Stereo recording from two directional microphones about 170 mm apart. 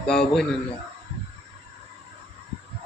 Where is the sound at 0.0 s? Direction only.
5° left (ahead or behind).